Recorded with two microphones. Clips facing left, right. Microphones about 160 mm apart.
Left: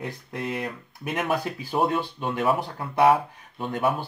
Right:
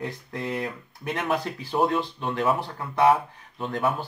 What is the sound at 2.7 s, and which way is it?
Speech, 15° left (ahead or behind).